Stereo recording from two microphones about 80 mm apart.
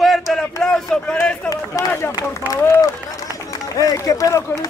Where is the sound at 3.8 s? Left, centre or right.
Left.